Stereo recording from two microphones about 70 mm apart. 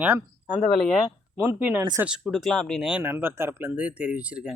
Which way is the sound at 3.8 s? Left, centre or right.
Centre.